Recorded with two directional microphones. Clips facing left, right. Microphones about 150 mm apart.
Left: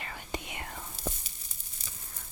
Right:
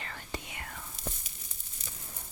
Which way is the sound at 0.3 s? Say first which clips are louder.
Left 4 dB; 20° left (ahead or behind).